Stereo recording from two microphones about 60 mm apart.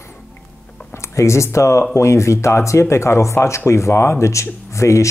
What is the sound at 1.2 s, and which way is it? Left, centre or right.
Speech, left.